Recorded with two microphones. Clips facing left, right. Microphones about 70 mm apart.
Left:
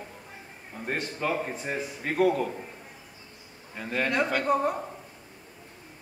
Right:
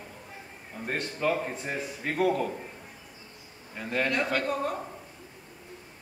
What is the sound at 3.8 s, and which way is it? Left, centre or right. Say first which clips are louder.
Speech: even; centre.